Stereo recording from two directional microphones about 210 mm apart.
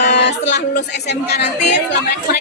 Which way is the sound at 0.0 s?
55° left (ahead or behind).